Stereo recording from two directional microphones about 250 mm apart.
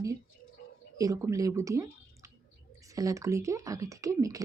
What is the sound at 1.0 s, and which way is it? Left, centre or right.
Speech, centre.